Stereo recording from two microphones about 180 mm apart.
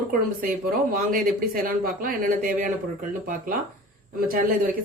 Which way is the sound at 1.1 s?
50° right (ahead or behind).